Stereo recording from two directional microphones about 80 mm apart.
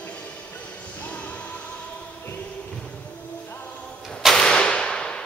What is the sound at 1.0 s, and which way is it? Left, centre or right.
Music, centre.